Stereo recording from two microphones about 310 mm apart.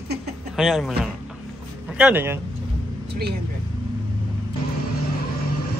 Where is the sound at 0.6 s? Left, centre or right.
Centre.